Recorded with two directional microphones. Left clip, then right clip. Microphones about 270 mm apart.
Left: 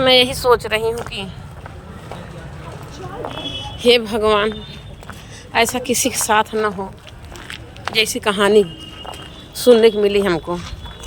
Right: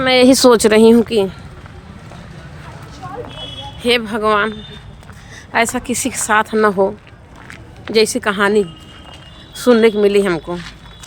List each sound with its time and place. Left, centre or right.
0.0 s speech: centre
0.3 s speech: right
3.8 s a woman's voice: centre